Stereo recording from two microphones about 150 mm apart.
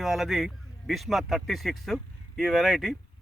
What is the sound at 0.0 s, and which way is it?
Speech, centre (ahead or behind).